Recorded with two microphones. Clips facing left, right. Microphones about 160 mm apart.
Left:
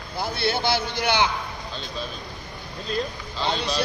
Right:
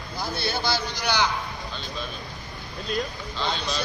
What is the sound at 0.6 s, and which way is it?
Speech, 55° left (ahead or behind).